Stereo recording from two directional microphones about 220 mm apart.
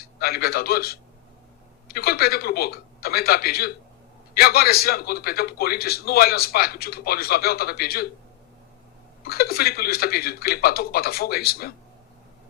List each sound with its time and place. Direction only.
0.2 s a man's voice: 45° left (ahead or behind)
9.2 s a man's voice: 45° left (ahead or behind)